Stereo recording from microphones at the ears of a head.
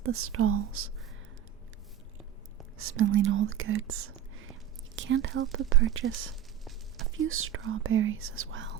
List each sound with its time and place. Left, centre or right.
0.0 s speech: right
2.7 s speech: right